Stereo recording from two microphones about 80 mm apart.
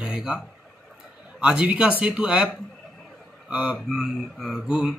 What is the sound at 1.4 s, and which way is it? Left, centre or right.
Speech, centre.